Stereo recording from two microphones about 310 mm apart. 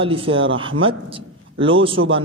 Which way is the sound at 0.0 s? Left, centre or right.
Centre.